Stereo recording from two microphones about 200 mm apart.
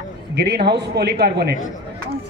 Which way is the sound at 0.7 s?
55° right (ahead or behind).